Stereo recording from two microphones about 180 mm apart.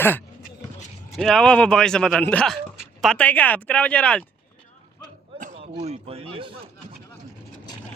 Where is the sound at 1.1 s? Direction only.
Centre (ahead or behind).